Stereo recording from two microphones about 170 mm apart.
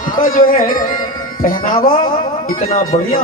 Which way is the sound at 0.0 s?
55° left (ahead or behind).